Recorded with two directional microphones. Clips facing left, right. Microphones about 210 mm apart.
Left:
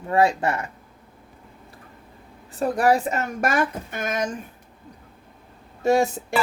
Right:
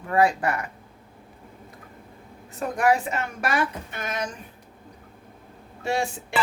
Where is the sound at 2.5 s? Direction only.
35° left (ahead or behind).